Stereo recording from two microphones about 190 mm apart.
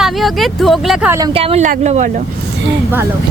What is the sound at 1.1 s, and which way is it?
Speech, 15° right (ahead or behind).